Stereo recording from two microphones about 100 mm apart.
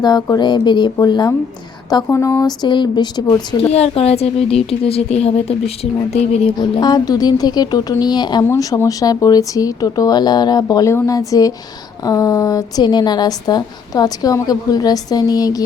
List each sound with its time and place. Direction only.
0.0 s speech: 45° left (ahead or behind)
2.0 s speech: 30° left (ahead or behind); by 3.3 s 45° left (ahead or behind)
3.7 s speech: 90° left
6.6 s speech: 45° left (ahead or behind)
8.4 s a woman's voice: 30° left (ahead or behind)